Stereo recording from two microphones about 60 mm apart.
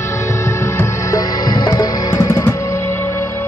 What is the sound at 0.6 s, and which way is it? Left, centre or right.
Music, left.